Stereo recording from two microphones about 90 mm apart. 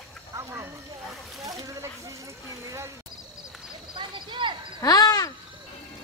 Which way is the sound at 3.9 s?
65° right (ahead or behind).